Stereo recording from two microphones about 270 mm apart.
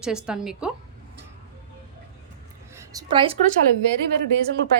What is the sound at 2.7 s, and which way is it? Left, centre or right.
Speech, centre.